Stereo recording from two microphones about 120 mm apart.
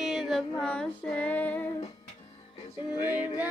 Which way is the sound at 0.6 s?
5° left (ahead or behind).